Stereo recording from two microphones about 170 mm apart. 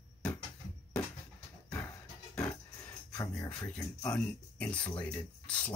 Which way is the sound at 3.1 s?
20° left (ahead or behind).